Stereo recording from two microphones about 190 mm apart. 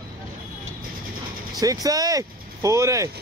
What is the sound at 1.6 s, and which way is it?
Speech, 20° right (ahead or behind).